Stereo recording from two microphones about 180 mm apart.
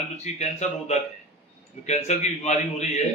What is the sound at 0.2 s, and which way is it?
A man's voice, 35° left (ahead or behind).